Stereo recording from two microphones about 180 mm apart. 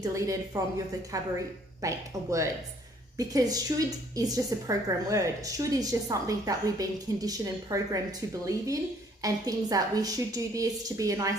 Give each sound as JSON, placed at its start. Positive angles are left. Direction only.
{"t": 0.0, "sound": "a woman's voice", "side_deg": -20}